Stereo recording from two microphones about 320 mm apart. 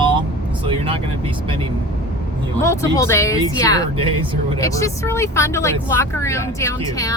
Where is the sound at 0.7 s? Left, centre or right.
Centre.